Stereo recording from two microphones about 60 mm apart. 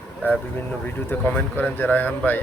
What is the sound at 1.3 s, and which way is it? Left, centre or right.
A man's voice, left.